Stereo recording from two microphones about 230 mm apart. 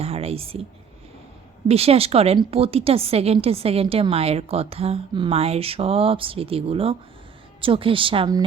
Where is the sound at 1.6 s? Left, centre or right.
Right.